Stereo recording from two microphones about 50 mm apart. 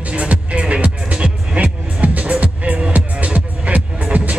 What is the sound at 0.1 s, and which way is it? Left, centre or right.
Music, right.